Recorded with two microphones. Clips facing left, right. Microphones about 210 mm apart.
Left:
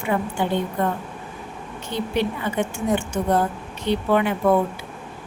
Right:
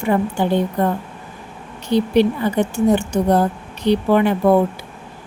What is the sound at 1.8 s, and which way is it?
A woman's voice, 35° right (ahead or behind).